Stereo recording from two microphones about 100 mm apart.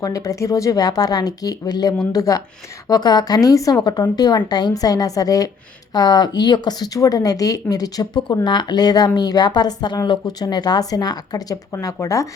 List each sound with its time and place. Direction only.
0.0 s a woman's voice: 35° left (ahead or behind)